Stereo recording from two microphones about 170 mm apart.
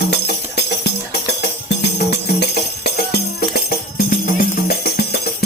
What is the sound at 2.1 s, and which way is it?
Music, 75° left (ahead or behind).